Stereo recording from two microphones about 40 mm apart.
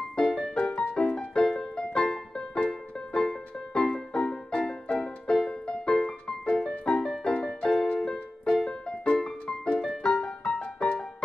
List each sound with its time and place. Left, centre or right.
0.2 s music: centre